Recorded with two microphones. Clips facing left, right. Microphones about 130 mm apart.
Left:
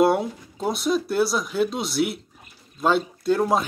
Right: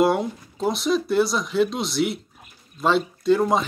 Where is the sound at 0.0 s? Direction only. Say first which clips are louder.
Left 1 dB; centre (ahead or behind).